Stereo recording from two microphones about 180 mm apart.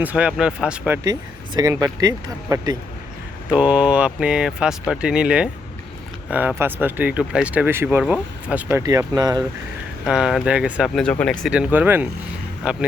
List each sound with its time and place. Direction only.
0.0 s speech: 10° right (ahead or behind)
1.5 s speech: 20° right (ahead or behind)
3.5 s speech: 5° right (ahead or behind)
6.6 s speech: 10° right (ahead or behind)
8.8 s speech: 20° right (ahead or behind)
10.1 s speech: 5° right (ahead or behind)